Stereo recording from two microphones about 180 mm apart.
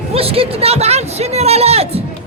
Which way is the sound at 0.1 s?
30° right (ahead or behind).